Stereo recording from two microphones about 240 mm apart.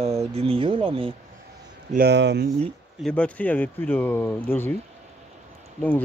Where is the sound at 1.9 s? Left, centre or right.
Right.